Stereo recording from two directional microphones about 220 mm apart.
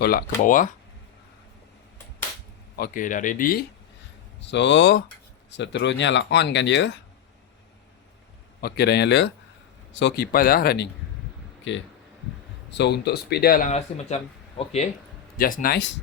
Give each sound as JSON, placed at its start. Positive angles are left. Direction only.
{"t": 0.0, "sound": "speech", "side_deg": 40}
{"t": 2.7, "sound": "speech", "side_deg": 40}
{"t": 4.4, "sound": "speech", "side_deg": 55}
{"t": 8.6, "sound": "speech", "side_deg": 45}
{"t": 11.7, "sound": "speech", "side_deg": 55}
{"t": 15.4, "sound": "speech", "side_deg": 40}